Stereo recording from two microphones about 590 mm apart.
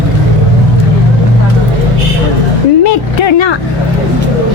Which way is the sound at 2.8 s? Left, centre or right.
Left.